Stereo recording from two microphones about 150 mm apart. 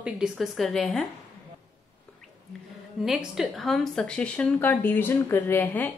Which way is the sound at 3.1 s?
5° right (ahead or behind).